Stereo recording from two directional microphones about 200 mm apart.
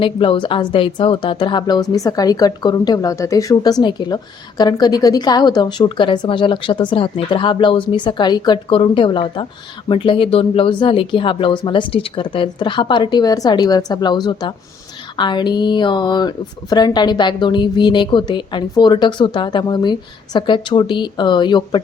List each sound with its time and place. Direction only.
0.0 s a woman's voice: 25° left (ahead or behind)